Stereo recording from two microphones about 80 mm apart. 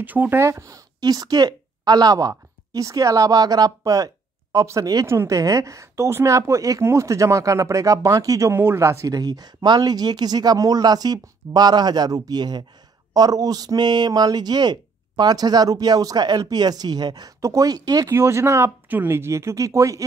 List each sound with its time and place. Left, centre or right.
0.0 s speech: right
0.4 s a woman's voice: right
1.0 s a woman's voice: right
8.5 s a woman's voice: right
9.1 s speech: right
17.4 s speech: right
18.1 s a woman's voice: right